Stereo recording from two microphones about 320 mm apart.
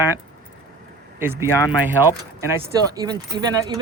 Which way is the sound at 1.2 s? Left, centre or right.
Centre.